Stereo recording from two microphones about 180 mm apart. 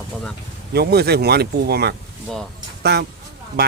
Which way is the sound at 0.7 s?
60° right (ahead or behind).